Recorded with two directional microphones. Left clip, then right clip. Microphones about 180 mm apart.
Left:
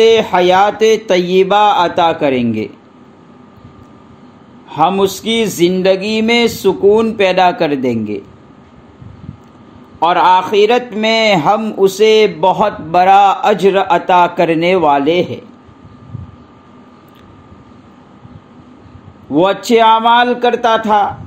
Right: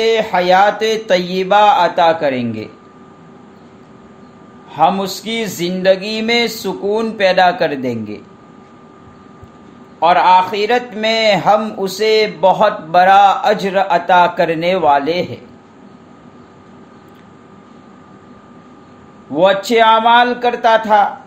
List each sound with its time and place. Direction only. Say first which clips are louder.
0.0 s a man's voice: left 5 dB; 35° left (ahead or behind)
4.6 s a man's voice: left 2 dB; 35° left (ahead or behind)
9.9 s a man's voice: even; 35° left (ahead or behind)
19.3 s a man's voice: left 1 dB; 35° left (ahead or behind)